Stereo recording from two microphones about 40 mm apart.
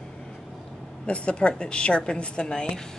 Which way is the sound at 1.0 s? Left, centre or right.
Left.